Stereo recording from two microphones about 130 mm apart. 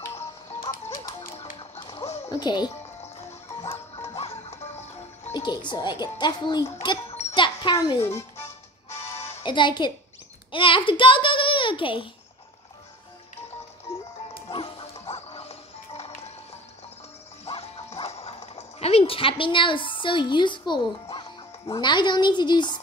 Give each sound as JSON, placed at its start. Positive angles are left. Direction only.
{"t": 1.6, "sound": "music", "side_deg": 40}
{"t": 2.3, "sound": "a child's voice", "side_deg": 35}
{"t": 3.7, "sound": "music", "side_deg": 20}
{"t": 4.2, "sound": "music", "side_deg": 55}
{"t": 5.3, "sound": "a child's voice", "side_deg": 35}
{"t": 7.3, "sound": "music", "side_deg": 40}
{"t": 7.7, "sound": "a child's voice", "side_deg": 30}
{"t": 9.4, "sound": "a child's voice", "side_deg": 35}
{"t": 14.5, "sound": "music", "side_deg": 45}
{"t": 17.5, "sound": "music", "side_deg": 50}